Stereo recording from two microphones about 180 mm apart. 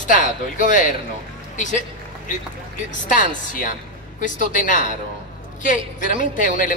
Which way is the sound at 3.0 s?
45° left (ahead or behind).